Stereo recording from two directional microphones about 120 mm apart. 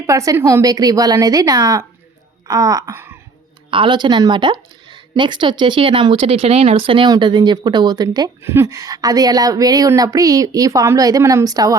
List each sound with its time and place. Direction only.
0.0 s a woman's voice: 25° right (ahead or behind)
2.9 s speech: 20° right (ahead or behind)
3.7 s speech: 45° right (ahead or behind)
8.4 s speech: 20° right (ahead or behind)